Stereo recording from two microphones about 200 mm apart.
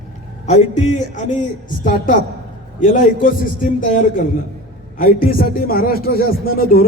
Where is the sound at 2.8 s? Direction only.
40° left (ahead or behind).